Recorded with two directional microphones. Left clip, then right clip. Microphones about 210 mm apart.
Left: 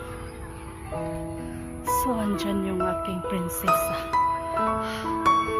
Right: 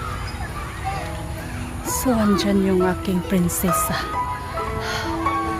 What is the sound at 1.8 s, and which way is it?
Speech, centre (ahead or behind).